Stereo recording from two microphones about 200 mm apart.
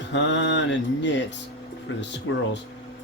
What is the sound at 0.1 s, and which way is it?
Speech, 65° left (ahead or behind).